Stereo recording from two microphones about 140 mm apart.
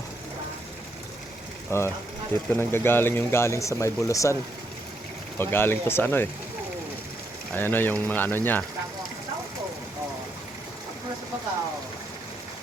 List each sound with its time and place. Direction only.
1.7 s speech: 20° left (ahead or behind)
5.4 s speech: 15° left (ahead or behind)
7.5 s speech: 15° left (ahead or behind)